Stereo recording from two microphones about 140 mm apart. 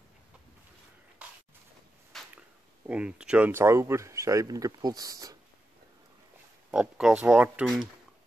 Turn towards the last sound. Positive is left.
turn(degrees=-10)  # may be behind; listen again after turning